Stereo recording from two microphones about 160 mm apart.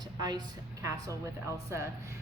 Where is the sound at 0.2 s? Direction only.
25° right (ahead or behind).